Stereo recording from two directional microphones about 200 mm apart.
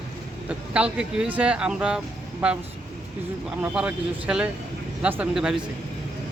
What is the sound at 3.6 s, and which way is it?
Speech, 5° right (ahead or behind).